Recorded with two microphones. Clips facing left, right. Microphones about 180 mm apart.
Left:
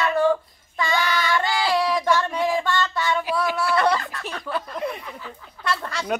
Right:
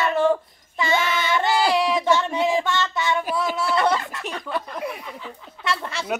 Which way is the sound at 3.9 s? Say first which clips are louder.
Right 1 dB; 20° right (ahead or behind).